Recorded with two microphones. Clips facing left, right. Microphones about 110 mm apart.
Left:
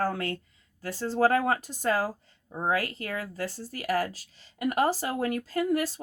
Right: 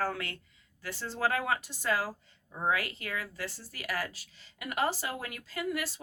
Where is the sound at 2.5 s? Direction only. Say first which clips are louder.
Left 3 dB; 30° left (ahead or behind).